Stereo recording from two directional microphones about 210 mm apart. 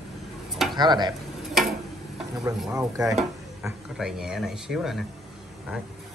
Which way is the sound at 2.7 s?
15° right (ahead or behind).